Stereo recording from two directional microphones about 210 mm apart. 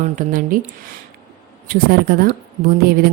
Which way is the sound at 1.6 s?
45° right (ahead or behind).